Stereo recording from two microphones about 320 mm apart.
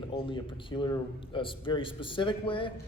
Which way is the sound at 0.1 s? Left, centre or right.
Centre.